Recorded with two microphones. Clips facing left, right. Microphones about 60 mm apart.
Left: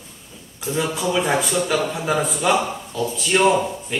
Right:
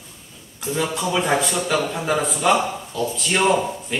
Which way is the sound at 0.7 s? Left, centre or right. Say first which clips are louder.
Left 1 dB; centre.